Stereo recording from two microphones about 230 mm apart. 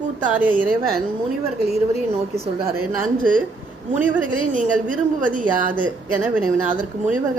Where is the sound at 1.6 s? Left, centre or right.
Right.